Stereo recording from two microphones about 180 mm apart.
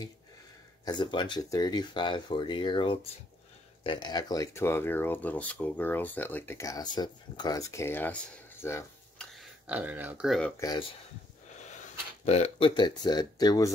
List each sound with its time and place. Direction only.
0.8 s speech: 25° left (ahead or behind)
9.2 s speech: centre (ahead or behind)
10.6 s speech: 20° left (ahead or behind)
12.3 s speech: 35° left (ahead or behind)